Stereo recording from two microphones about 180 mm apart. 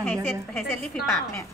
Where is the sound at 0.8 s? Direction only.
5° left (ahead or behind).